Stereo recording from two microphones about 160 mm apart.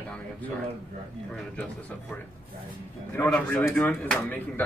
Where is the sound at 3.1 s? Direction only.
10° left (ahead or behind).